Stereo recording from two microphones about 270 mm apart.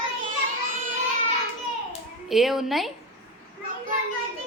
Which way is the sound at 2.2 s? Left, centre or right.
Centre.